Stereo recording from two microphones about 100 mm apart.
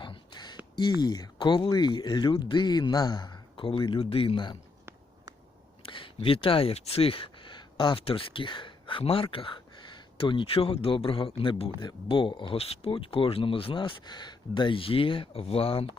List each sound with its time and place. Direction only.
0.0 s a sound: 50° left (ahead or behind)
1.0 s speech: 45° left (ahead or behind); by 4.5 s 60° left (ahead or behind)
5.8 s speech: 60° left (ahead or behind)
11.8 s speech: 50° left (ahead or behind); by 16.0 s 70° left (ahead or behind)